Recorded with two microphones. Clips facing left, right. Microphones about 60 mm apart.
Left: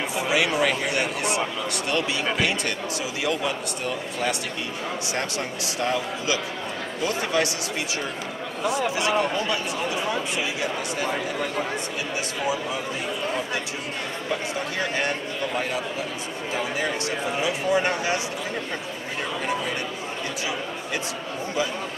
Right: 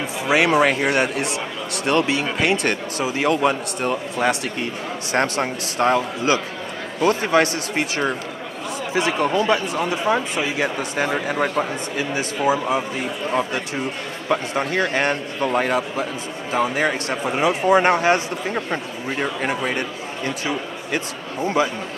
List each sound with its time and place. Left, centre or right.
0.3 s a man's voice: right
8.9 s speech: right
11.2 s a man's voice: right
14.3 s a man's voice: right